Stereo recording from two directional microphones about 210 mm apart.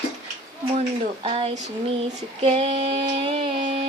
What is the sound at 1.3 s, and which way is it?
Speech, 30° right (ahead or behind).